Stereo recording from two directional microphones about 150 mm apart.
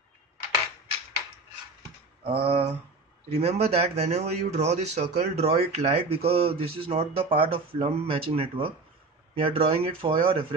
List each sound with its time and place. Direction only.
2.2 s speech: 40° right (ahead or behind)